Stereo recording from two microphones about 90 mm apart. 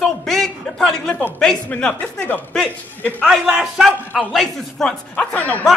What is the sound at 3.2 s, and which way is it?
Speech, 10° right (ahead or behind).